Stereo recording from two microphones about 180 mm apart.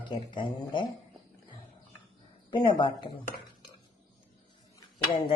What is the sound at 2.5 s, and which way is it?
Speech, 25° left (ahead or behind).